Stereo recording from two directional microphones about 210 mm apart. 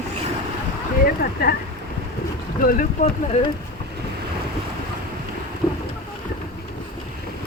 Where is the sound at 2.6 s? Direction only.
40° left (ahead or behind).